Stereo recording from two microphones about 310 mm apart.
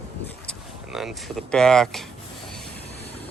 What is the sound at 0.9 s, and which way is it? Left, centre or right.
Speech, centre.